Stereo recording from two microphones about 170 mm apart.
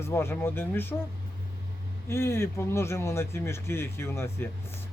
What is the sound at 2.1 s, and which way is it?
Speech, 15° left (ahead or behind).